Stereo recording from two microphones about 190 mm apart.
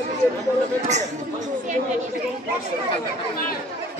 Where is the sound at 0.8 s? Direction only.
35° right (ahead or behind).